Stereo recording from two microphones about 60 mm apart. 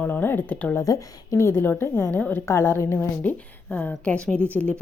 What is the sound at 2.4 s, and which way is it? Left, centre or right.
Speech, left.